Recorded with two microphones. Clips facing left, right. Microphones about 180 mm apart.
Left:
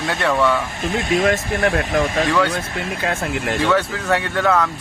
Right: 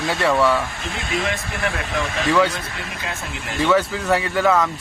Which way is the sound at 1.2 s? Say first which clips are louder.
Left 6 dB; 45° left (ahead or behind).